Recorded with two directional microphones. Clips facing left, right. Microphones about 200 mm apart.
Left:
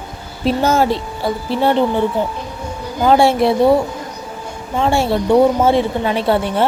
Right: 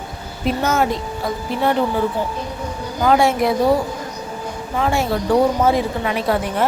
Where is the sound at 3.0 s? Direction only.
30° left (ahead or behind).